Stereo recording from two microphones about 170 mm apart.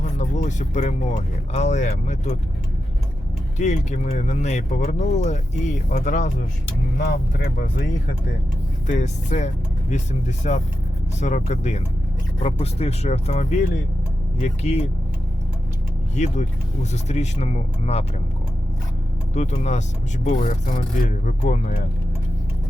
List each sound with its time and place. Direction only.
0.0 s speech: 45° left (ahead or behind)
3.6 s speech: 45° left (ahead or behind)
7.1 s speech: 60° left (ahead or behind)
8.9 s speech: 45° left (ahead or behind)
16.1 s speech: 45° left (ahead or behind)
19.3 s speech: 45° left (ahead or behind)